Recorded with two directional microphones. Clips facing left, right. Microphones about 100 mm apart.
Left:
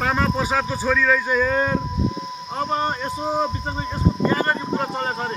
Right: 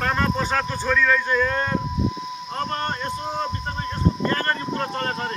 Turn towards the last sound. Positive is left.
turn(degrees=10)  # may be behind; listen again after turning